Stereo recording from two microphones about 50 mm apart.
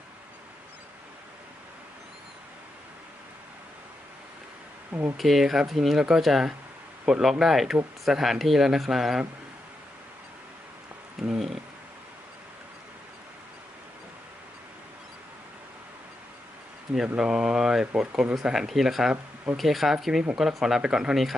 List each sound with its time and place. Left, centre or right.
4.9 s speech: right
5.1 s speech: centre
11.2 s speech: centre
17.2 s speech: centre